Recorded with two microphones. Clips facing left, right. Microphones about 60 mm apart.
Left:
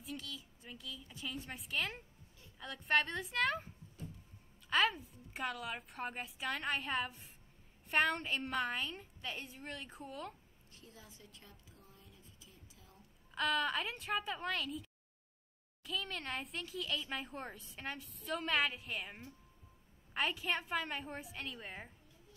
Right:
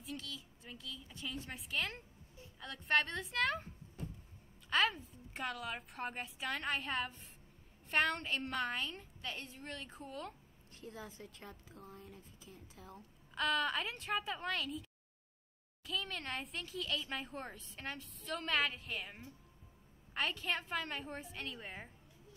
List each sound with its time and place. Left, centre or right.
0.0 s a child's voice: centre
10.8 s a woman's voice: right
13.3 s a child's voice: centre